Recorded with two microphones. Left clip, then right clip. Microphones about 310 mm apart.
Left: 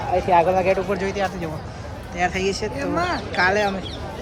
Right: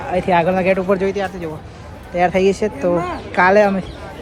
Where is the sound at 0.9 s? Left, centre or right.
Centre.